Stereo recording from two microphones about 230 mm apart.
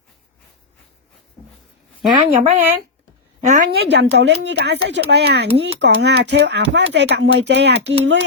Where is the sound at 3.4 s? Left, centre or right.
Right.